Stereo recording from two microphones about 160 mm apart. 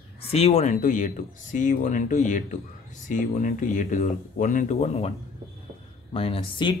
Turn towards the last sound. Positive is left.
turn(degrees=35)  # may be behind; listen again after turning